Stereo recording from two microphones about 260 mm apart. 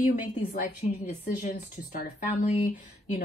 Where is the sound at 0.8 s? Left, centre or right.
Left.